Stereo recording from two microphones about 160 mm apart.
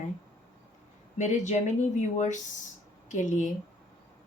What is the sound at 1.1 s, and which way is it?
Speech, 50° left (ahead or behind).